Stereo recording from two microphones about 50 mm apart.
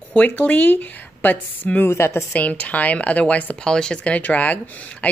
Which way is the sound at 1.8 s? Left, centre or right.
Left.